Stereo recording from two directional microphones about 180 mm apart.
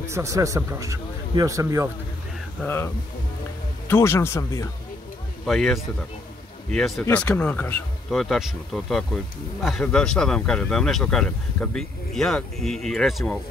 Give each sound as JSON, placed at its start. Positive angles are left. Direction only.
{"t": 0.0, "sound": "speech", "side_deg": -15}
{"t": 2.6, "sound": "speech", "side_deg": 10}
{"t": 5.4, "sound": "speech", "side_deg": 0}